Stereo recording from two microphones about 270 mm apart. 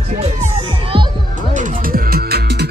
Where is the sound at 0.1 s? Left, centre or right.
Right.